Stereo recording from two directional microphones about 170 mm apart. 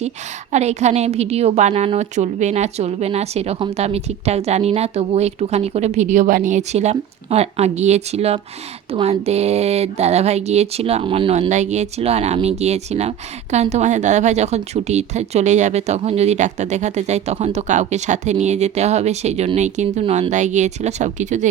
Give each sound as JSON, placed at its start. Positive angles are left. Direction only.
{"t": 0.5, "sound": "speech", "side_deg": -40}